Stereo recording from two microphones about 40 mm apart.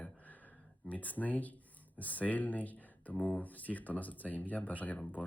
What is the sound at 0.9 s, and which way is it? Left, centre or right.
Speech, left.